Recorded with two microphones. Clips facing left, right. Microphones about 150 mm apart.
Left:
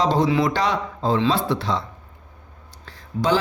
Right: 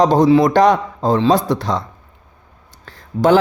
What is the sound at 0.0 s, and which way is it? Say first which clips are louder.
Speech: right 8 dB; 45° right (ahead or behind).